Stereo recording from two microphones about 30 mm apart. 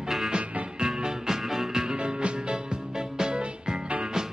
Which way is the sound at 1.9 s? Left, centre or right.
Right.